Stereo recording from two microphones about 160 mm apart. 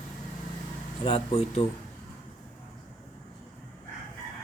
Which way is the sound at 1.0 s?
35° left (ahead or behind).